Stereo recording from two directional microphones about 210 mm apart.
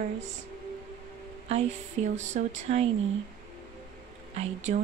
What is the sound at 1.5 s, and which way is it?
Speech, 30° right (ahead or behind).